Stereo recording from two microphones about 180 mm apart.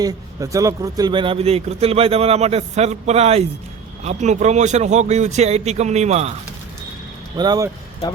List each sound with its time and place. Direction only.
0.0 s speech: 20° right (ahead or behind); by 6.3 s 35° right (ahead or behind)
7.3 s speech: 20° right (ahead or behind)